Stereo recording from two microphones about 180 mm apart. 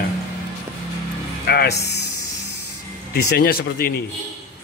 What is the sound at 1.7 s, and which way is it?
Speech, 15° left (ahead or behind).